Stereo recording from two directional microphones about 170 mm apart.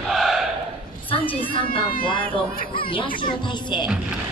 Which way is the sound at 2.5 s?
60° left (ahead or behind).